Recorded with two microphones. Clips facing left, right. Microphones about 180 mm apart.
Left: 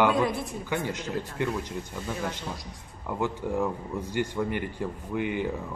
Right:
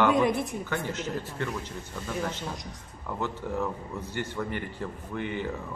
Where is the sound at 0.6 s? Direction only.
15° left (ahead or behind).